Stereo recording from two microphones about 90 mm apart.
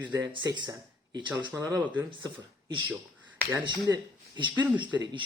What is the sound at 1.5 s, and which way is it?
Speech, 35° right (ahead or behind).